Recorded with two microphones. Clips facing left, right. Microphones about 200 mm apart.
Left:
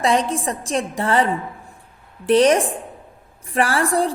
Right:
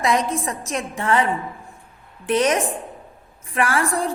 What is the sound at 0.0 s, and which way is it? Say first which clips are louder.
A woman's voice: left 2 dB; 30° left (ahead or behind).